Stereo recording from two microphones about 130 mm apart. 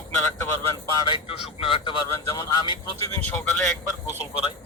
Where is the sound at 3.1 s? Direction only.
10° left (ahead or behind).